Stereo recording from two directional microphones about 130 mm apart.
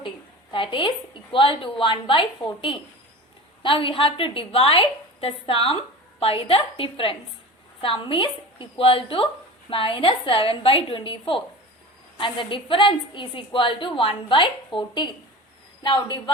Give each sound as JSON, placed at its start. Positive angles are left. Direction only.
{"t": 0.5, "sound": "a woman's voice", "side_deg": 40}